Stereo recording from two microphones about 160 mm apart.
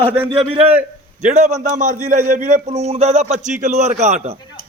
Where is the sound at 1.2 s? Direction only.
45° right (ahead or behind).